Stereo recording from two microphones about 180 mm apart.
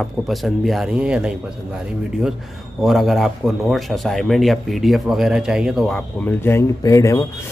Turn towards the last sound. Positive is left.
turn(degrees=20)  # may be behind; listen again after turning